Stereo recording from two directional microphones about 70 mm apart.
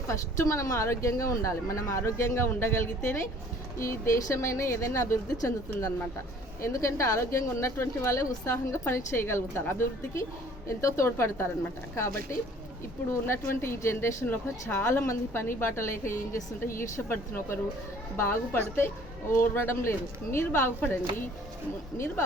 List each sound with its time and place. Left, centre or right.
0.1 s a woman's voice: left
3.8 s a woman's voice: left
6.6 s a woman's voice: left
13.2 s speech: left